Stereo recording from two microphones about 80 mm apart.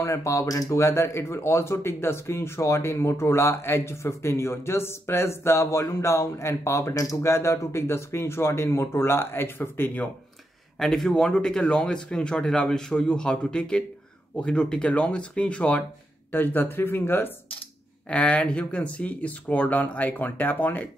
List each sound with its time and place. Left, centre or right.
0.0 s speech: left
10.8 s speech: centre; by 17.3 s left
18.1 s speech: centre